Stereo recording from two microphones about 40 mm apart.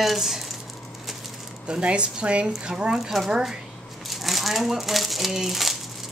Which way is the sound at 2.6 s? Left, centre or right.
Right.